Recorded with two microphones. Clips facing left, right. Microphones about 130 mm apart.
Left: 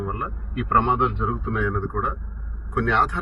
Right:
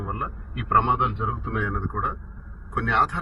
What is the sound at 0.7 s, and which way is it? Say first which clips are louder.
Speech: left 1 dB; centre (ahead or behind).